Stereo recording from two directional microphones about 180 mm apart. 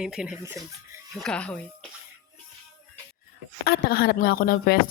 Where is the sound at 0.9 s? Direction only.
20° right (ahead or behind).